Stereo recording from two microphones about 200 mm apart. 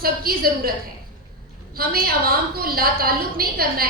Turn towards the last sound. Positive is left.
turn(degrees=-50)  # may be behind; listen again after turning